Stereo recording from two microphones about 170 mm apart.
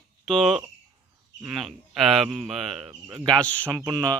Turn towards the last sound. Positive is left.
turn(degrees=-20)  # may be behind; listen again after turning